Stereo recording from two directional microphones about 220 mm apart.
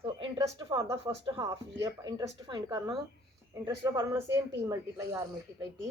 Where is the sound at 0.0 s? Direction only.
15° right (ahead or behind).